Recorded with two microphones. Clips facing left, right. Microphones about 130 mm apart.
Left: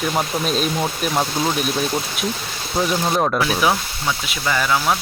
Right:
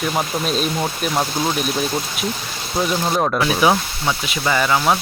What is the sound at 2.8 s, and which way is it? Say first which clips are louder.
Speech: even; centre (ahead or behind).